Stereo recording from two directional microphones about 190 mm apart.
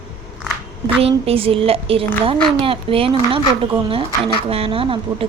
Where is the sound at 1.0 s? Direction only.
30° right (ahead or behind).